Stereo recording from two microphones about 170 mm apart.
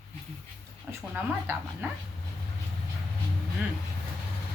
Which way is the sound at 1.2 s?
10° right (ahead or behind).